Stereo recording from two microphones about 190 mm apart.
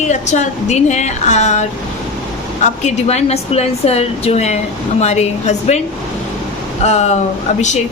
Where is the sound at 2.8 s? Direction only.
35° left (ahead or behind).